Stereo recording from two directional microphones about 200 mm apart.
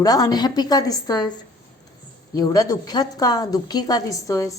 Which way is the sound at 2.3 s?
20° left (ahead or behind).